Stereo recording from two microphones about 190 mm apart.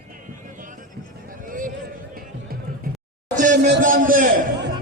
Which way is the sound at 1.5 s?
45° right (ahead or behind).